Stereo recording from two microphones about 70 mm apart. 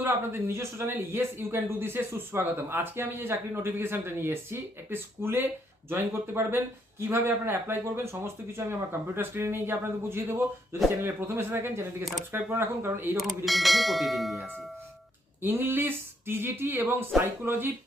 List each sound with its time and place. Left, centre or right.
0.0 s a man's voice: right
13.1 s bell: centre
15.4 s a man's voice: right